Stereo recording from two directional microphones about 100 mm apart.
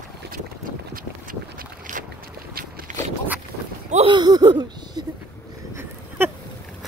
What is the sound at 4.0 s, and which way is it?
Speech, 50° right (ahead or behind).